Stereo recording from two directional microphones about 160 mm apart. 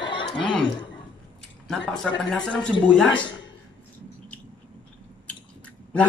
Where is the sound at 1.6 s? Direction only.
5° left (ahead or behind).